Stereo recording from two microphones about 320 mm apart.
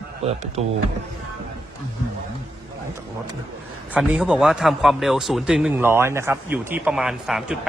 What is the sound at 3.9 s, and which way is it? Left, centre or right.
A man's voice, centre.